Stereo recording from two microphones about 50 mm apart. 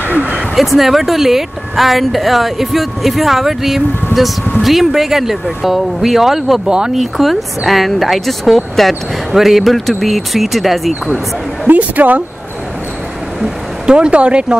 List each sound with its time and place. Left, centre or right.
0.1 s a sound: right
0.6 s a woman's voice: centre
7.0 s a woman's voice: centre
11.6 s speech: right
13.8 s speech: centre